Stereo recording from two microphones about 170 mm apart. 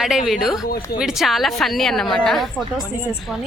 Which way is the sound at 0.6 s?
60° left (ahead or behind).